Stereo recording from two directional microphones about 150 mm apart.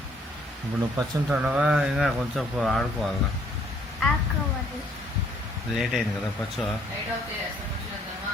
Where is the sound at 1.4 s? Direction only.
5° right (ahead or behind).